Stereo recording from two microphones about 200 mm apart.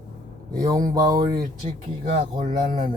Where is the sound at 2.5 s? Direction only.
40° right (ahead or behind).